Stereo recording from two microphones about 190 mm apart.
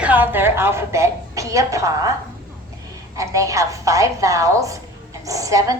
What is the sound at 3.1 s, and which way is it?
A woman's voice, 15° right (ahead or behind).